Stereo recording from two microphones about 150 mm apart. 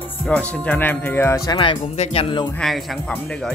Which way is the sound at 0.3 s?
10° left (ahead or behind).